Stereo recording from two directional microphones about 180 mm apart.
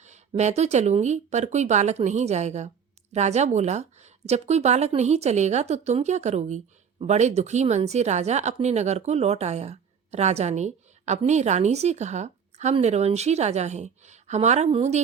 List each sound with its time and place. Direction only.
0.0 s speech: 40° right (ahead or behind)